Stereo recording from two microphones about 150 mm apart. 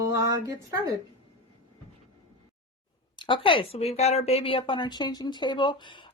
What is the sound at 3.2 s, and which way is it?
Speech, 35° left (ahead or behind).